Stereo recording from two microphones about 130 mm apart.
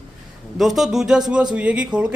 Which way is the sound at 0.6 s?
Centre (ahead or behind).